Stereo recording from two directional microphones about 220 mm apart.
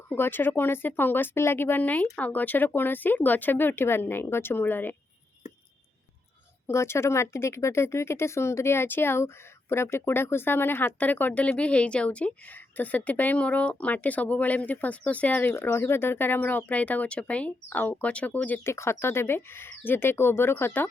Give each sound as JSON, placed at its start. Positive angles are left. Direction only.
{"t": 0.1, "sound": "speech", "side_deg": 10}
{"t": 6.7, "sound": "speech", "side_deg": 10}